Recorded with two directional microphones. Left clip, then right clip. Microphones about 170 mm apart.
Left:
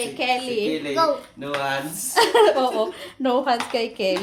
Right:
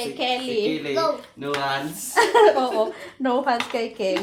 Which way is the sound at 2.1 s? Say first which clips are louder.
Even; 20° left (ahead or behind).